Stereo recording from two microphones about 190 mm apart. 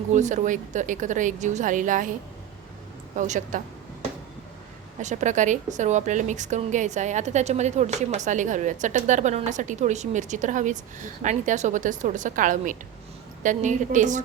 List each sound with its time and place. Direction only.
0.1 s a woman's voice: 40° right (ahead or behind)
3.2 s a woman's voice: 40° right (ahead or behind)
4.9 s a woman's voice: 40° right (ahead or behind)